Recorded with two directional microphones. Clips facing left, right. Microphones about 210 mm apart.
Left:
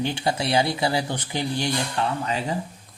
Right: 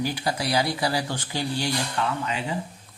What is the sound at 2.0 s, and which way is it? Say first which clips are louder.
Speech: left 2 dB; 35° left (ahead or behind).